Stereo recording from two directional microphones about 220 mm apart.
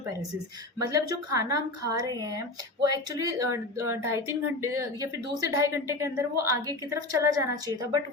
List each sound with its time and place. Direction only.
0.9 s speech: 15° right (ahead or behind)